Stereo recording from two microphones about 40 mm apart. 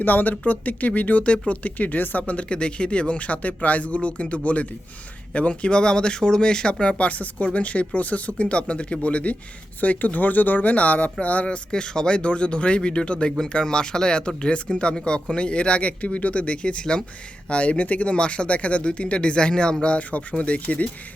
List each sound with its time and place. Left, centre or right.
0.0 s speech: left
11.4 s speech: left